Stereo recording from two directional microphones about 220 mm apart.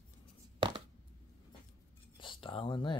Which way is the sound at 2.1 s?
20° left (ahead or behind).